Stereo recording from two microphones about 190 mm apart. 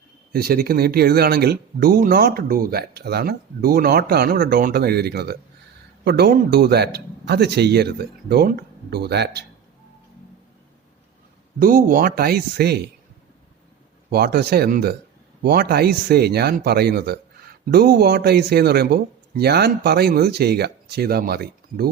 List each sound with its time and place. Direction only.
0.3 s speech: 50° right (ahead or behind)
11.6 s speech: 45° right (ahead or behind)
14.1 s speech: 55° right (ahead or behind)